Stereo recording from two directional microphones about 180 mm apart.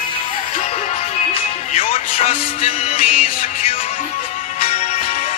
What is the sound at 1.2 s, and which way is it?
Music, 35° left (ahead or behind).